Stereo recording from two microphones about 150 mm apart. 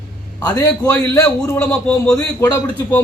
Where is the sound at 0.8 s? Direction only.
15° left (ahead or behind).